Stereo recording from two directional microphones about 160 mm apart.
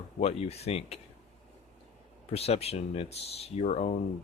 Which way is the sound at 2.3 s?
40° left (ahead or behind).